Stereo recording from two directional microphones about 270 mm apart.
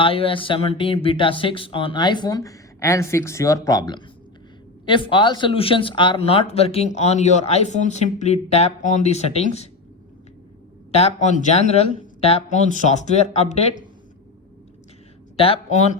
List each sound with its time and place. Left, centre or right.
0.0 s speech: centre
10.9 s speech: left
15.4 s speech: left